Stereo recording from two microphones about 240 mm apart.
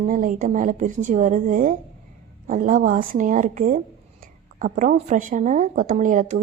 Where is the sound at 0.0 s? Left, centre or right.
Right.